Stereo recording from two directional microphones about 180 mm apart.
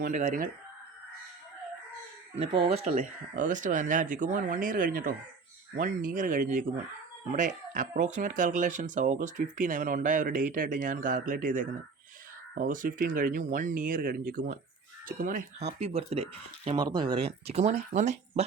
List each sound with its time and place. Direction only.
0.0 s speech: 40° right (ahead or behind)
2.4 s speech: 30° right (ahead or behind)
2.9 s speech: 50° right (ahead or behind)
16.7 s speech: 25° right (ahead or behind); by 18.4 s 40° right (ahead or behind)